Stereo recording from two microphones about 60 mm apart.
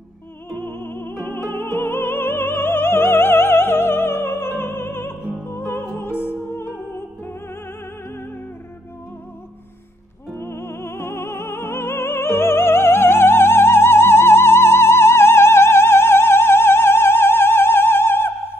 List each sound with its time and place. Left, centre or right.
0.5 s music: left
10.3 s music: left